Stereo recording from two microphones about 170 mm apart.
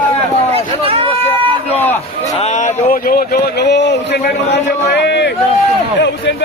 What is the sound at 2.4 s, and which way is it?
A man's voice, 45° left (ahead or behind).